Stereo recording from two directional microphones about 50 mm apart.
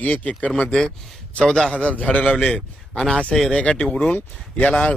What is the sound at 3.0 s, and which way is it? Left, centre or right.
Speech, centre.